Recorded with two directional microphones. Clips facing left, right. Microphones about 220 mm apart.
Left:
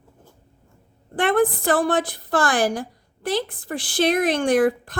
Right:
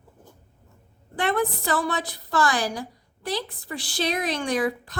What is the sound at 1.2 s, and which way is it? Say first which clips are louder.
A woman's voice: left 6 dB; 50° left (ahead or behind).